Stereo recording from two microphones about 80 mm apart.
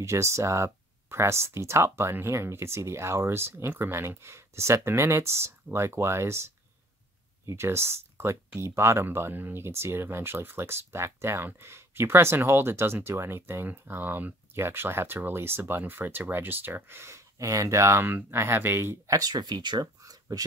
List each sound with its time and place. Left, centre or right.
0.0 s speech: right
7.4 s speech: right
17.4 s speech: right
18.0 s speech: right
19.1 s speech: right